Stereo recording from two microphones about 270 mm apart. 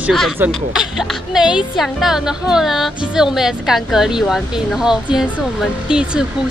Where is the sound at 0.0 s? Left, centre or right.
Centre.